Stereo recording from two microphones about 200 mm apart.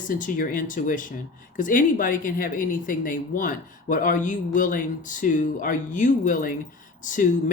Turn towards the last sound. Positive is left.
turn(degrees=40)  # may be behind; listen again after turning